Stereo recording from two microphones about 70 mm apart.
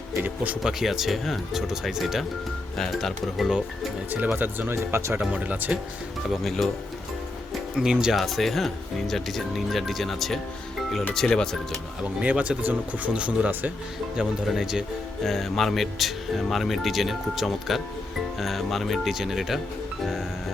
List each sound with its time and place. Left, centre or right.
0.6 s speech: centre
4.1 s speech: right
4.7 s speech: right
5.3 s speech: right
6.3 s speech: centre
7.8 s speech: centre
8.1 s speech: centre
12.2 s speech: centre
14.4 s speech: centre